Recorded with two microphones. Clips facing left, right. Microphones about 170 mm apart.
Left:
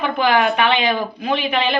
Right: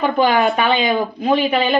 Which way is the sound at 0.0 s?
40° right (ahead or behind).